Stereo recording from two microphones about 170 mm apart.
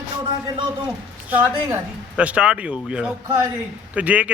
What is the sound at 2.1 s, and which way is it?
A man's voice, 5° right (ahead or behind).